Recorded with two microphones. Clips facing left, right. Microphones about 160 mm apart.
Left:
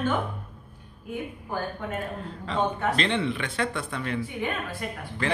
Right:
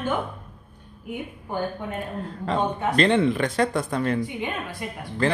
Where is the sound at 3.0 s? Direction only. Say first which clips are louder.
Right 7 dB; 45° right (ahead or behind).